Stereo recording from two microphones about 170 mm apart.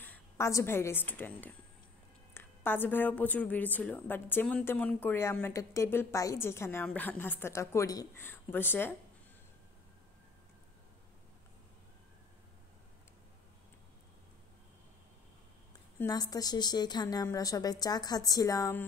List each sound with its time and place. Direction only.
0.0 s a woman's voice: 15° left (ahead or behind)
16.0 s a woman's voice: 20° left (ahead or behind)